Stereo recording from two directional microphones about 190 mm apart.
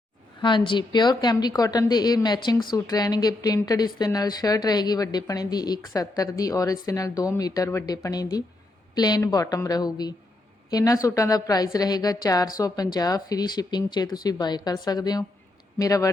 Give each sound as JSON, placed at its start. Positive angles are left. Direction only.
{"t": 0.4, "sound": "a woman's voice", "side_deg": 25}